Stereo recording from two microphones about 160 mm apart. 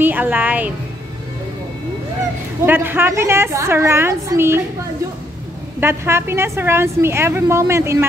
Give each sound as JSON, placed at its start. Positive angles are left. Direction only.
{"t": 0.0, "sound": "a woman's voice", "side_deg": -10}
{"t": 2.6, "sound": "a woman's voice", "side_deg": -15}
{"t": 5.8, "sound": "a woman's voice", "side_deg": -15}